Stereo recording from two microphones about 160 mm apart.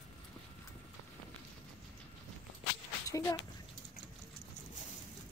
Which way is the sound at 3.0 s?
20° left (ahead or behind).